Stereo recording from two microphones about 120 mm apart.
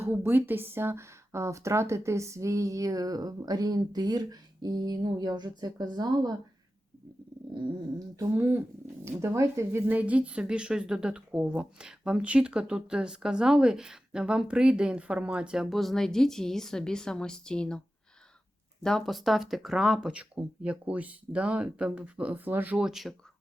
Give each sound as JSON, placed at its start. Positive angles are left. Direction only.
{"t": 0.0, "sound": "speech", "side_deg": -15}
{"t": 7.5, "sound": "a woman's voice", "side_deg": -30}
{"t": 18.8, "sound": "a woman's voice", "side_deg": 5}